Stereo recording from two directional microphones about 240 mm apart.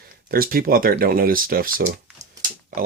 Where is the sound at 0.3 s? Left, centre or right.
Right.